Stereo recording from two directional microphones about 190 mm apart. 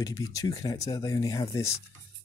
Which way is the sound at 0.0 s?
20° left (ahead or behind).